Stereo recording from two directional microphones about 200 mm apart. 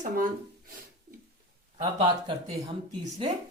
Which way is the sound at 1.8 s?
30° right (ahead or behind).